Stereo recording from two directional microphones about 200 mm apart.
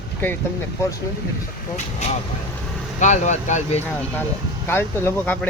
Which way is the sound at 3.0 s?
35° left (ahead or behind).